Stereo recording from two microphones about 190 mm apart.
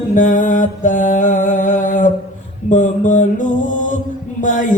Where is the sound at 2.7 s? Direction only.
40° left (ahead or behind).